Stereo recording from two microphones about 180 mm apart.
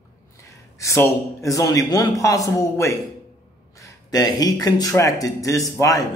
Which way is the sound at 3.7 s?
20° left (ahead or behind).